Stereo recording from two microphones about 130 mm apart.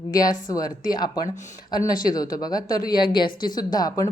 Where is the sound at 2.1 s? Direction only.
30° left (ahead or behind).